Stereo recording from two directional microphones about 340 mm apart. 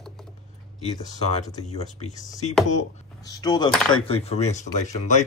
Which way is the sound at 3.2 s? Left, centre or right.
Centre.